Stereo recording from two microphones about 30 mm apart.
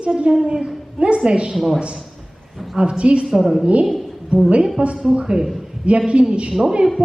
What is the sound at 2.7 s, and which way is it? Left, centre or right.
Speech, right.